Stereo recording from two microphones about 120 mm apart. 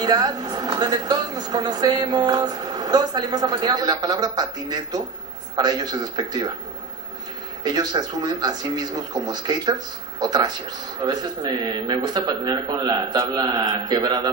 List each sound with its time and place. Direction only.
0.0 s a woman's voice: 35° right (ahead or behind)
7.6 s a woman's voice: 35° right (ahead or behind)